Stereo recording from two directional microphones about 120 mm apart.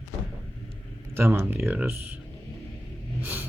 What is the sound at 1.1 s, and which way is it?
Speech, 20° right (ahead or behind).